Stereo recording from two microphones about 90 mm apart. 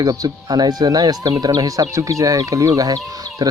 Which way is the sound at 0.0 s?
45° right (ahead or behind).